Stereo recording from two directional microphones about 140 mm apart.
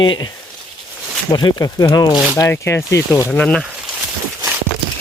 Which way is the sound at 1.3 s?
30° left (ahead or behind).